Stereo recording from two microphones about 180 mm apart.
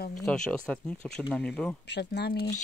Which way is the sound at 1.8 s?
70° left (ahead or behind).